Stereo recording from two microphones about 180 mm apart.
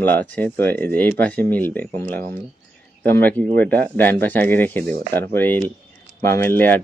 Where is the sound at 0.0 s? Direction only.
10° left (ahead or behind).